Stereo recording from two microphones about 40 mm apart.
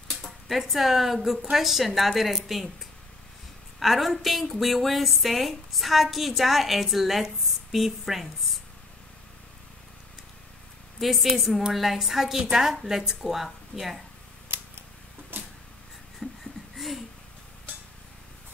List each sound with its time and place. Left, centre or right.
0.1 s speech: centre
3.8 s speech: centre
11.0 s a woman's voice: centre
15.3 s a sound: right
16.2 s wheeze: centre
16.7 s a sound: centre